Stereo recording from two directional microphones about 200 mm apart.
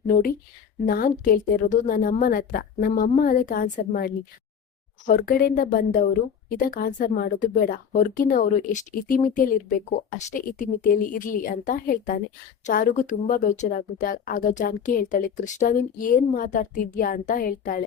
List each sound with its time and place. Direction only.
0.9 s a woman's voice: 45° left (ahead or behind)